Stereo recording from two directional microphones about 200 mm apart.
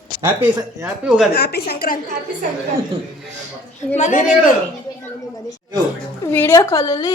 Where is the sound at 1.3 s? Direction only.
50° left (ahead or behind).